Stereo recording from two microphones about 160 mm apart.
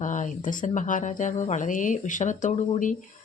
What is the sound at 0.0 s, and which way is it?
Speech, 50° left (ahead or behind).